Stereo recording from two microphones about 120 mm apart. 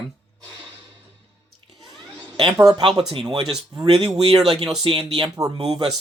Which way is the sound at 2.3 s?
40° right (ahead or behind).